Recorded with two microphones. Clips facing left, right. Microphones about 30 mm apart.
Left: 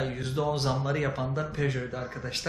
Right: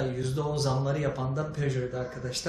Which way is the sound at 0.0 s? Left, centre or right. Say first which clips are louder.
Left 1 dB; left.